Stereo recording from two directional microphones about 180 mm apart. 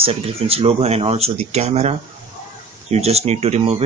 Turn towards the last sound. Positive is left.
turn(degrees=-35)  # may be behind; listen again after turning